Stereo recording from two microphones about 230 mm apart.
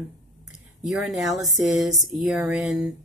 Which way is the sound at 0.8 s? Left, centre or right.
Centre.